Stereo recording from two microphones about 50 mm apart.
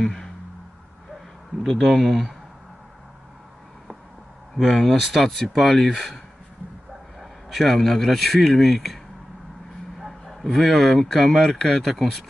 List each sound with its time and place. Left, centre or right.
1.6 s speech: centre
4.6 s speech: centre